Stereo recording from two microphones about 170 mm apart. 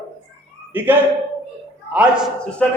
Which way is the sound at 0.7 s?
10° right (ahead or behind).